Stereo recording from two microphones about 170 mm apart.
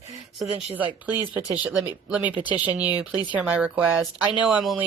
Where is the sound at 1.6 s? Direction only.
5° right (ahead or behind).